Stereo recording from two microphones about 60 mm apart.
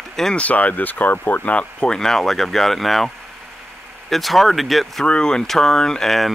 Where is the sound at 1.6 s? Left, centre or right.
Centre.